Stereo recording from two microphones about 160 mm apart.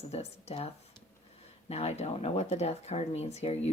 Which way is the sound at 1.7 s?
40° left (ahead or behind).